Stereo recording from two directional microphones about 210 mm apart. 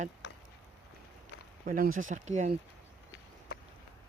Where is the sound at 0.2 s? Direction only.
55° left (ahead or behind).